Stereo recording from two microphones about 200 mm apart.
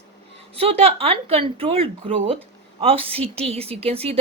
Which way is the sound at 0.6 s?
30° right (ahead or behind).